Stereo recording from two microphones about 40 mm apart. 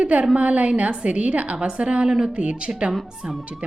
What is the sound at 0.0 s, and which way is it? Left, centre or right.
A woman's voice, right.